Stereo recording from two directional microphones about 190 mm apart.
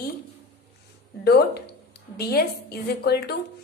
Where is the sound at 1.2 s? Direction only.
55° left (ahead or behind).